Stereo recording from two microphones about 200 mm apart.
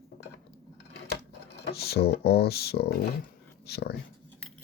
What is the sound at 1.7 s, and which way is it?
Speech, 50° left (ahead or behind).